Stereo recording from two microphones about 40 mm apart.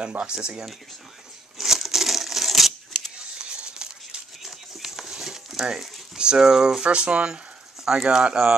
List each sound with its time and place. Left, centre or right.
0.2 s speech: right
1.6 s tearing: centre
3.2 s a sound: right
4.4 s a sound: centre
5.0 s stir: centre
6.1 s speech: centre
7.8 s speech: centre